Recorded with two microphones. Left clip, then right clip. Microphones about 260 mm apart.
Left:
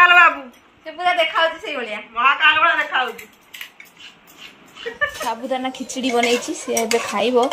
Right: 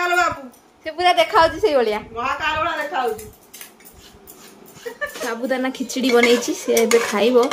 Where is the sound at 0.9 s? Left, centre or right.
Centre.